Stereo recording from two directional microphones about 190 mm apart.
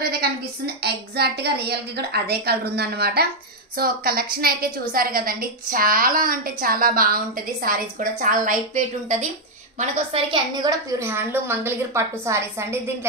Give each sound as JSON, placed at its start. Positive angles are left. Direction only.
{"t": 0.0, "sound": "a sound", "side_deg": -55}
{"t": 0.8, "sound": "a woman's voice", "side_deg": -60}
{"t": 10.1, "sound": "a woman's voice", "side_deg": -25}